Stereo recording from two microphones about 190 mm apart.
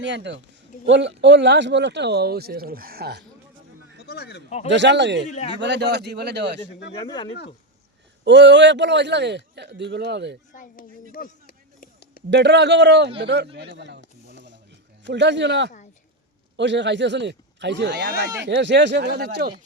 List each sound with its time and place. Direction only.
0.0 s speech: 70° right (ahead or behind)
4.0 s speech: 60° left (ahead or behind)
4.7 s speech: 70° right (ahead or behind)
7.0 s speech: 25° left (ahead or behind)
8.2 s speech: 65° right (ahead or behind)
10.5 s a sound: 45° left (ahead or behind)
12.3 s speech: 65° right (ahead or behind)
14.3 s a sound: 70° right (ahead or behind)
15.0 s speech: 70° right (ahead or behind)